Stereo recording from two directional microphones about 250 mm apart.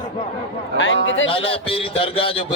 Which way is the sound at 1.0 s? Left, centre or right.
Left.